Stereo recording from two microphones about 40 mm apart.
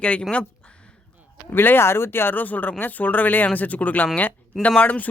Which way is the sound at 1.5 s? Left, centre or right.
Left.